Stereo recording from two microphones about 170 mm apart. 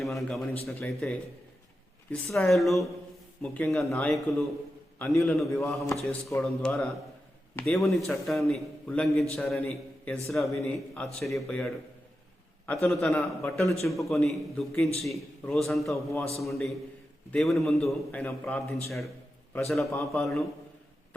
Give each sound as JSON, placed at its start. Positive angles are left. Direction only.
{"t": 0.0, "sound": "a man's voice", "side_deg": 0}
{"t": 3.9, "sound": "a man's voice", "side_deg": 15}
{"t": 4.9, "sound": "a man's voice", "side_deg": 0}
{"t": 13.4, "sound": "a man's voice", "side_deg": 15}
{"t": 13.8, "sound": "a man's voice", "side_deg": 0}